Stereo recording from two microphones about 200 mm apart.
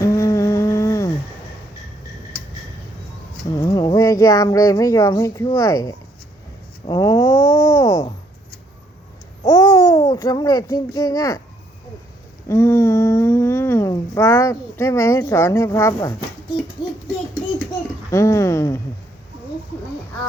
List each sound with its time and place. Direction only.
0.0 s a sound: 15° left (ahead or behind)
3.5 s speech: 20° left (ahead or behind)
9.4 s a child's voice: 20° left (ahead or behind)
12.5 s speech: 15° left (ahead or behind)
18.1 s speech: 15° left (ahead or behind)